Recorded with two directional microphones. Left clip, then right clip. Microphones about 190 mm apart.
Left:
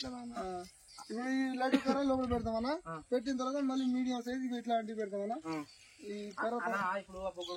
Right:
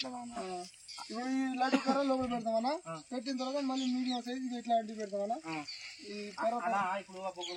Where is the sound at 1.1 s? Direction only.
15° right (ahead or behind).